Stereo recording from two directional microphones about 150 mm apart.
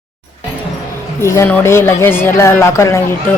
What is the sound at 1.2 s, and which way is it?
A woman's voice, 20° left (ahead or behind).